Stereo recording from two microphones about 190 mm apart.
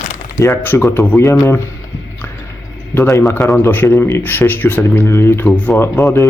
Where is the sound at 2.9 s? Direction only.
15° left (ahead or behind).